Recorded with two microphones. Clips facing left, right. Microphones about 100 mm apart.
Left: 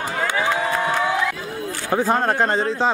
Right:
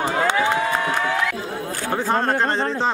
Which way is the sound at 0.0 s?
25° right (ahead or behind).